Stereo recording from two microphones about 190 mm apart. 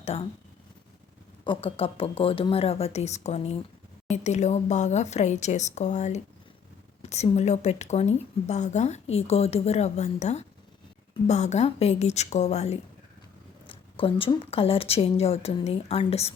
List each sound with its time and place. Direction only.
0.0 s speech: 30° left (ahead or behind)
1.5 s speech: 30° left (ahead or behind)